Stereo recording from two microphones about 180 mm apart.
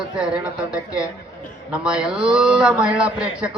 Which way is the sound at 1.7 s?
5° right (ahead or behind).